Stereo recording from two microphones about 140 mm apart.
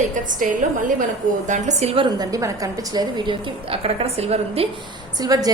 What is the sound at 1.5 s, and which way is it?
Speech, 55° right (ahead or behind).